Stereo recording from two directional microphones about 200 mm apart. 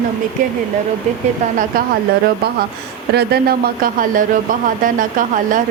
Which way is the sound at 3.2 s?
45° right (ahead or behind).